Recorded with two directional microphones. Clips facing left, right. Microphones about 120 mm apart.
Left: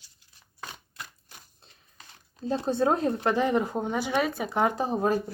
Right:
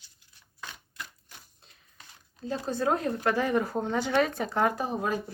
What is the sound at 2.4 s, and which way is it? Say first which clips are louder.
Speech: left 3 dB; 30° left (ahead or behind).